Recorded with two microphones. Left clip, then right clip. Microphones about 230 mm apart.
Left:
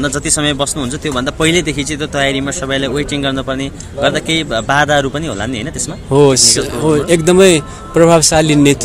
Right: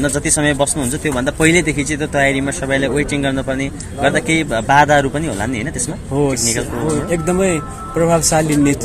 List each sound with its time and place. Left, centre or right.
0.0 s speech: centre
6.1 s speech: left